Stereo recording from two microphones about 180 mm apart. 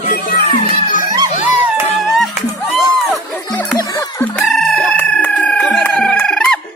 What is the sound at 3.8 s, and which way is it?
Music, 15° left (ahead or behind).